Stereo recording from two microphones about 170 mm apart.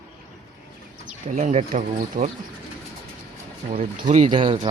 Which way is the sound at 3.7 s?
50° right (ahead or behind).